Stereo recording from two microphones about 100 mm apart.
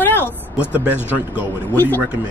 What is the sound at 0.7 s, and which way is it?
Speech, 15° right (ahead or behind).